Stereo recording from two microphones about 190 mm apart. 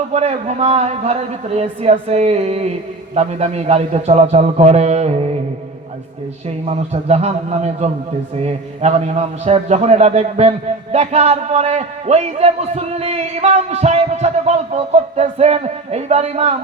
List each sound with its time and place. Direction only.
0.1 s a man's voice: 35° right (ahead or behind)
6.7 s a man's voice: 35° right (ahead or behind)